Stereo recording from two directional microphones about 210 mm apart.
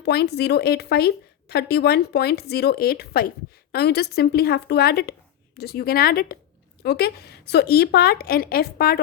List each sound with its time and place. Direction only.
0.0 s speech: 50° left (ahead or behind)